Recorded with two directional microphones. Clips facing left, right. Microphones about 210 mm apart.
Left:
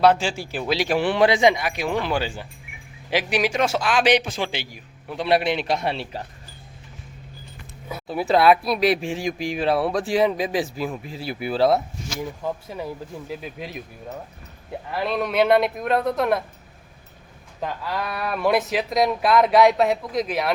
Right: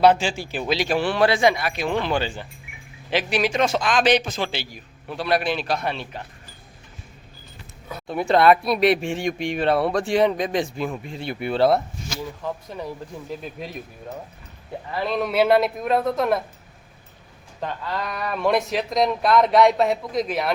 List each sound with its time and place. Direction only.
0.0 s a man's voice: centre (ahead or behind)
5.2 s a man's voice: 25° left (ahead or behind)
7.9 s speech: 5° left (ahead or behind)
14.8 s speech: centre (ahead or behind)
17.6 s speech: 5° left (ahead or behind)